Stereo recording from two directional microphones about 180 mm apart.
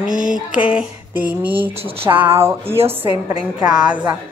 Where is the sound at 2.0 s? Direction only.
15° right (ahead or behind).